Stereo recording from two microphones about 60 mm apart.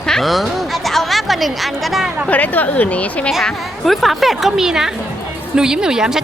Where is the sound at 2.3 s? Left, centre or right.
Left.